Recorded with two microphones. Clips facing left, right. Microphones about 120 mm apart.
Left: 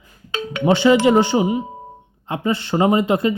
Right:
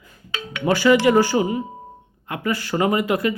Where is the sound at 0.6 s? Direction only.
25° left (ahead or behind).